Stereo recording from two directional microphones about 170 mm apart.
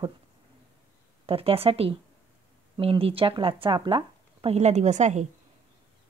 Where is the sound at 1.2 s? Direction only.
35° right (ahead or behind).